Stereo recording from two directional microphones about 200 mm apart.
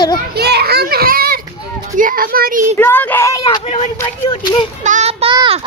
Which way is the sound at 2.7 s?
10° left (ahead or behind).